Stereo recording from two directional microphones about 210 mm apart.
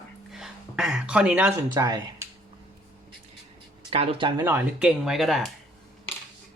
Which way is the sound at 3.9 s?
25° right (ahead or behind).